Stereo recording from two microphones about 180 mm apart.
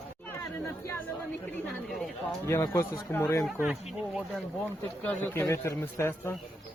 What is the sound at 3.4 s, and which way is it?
Speech, 5° right (ahead or behind).